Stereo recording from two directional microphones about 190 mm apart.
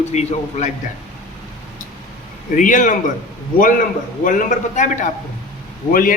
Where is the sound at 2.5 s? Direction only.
40° left (ahead or behind).